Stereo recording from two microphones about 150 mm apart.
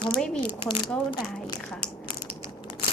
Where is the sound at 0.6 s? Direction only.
30° left (ahead or behind).